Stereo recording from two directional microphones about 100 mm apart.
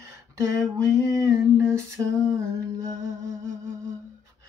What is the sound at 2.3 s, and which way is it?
Music, 30° right (ahead or behind).